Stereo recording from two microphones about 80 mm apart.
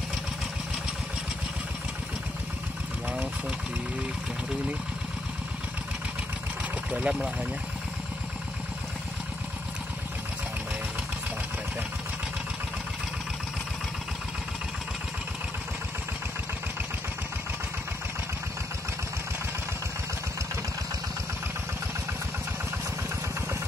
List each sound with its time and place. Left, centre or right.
3.1 s speech: centre
6.9 s speech: centre